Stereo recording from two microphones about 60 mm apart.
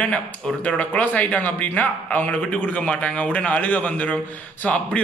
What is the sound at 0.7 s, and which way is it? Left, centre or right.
A man's voice, left.